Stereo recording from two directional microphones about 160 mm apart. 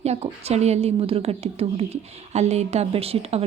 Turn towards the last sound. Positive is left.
turn(degrees=-40)  # may be behind; listen again after turning